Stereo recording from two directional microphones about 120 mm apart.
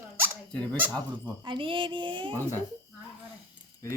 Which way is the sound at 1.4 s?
45° right (ahead or behind).